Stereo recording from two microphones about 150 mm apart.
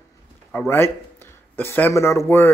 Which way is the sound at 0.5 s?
15° left (ahead or behind).